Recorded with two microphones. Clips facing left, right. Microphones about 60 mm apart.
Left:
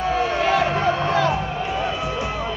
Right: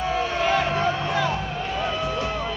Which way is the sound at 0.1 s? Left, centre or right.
Centre.